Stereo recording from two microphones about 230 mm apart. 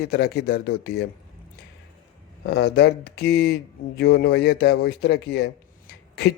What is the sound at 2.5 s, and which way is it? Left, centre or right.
Speech, left.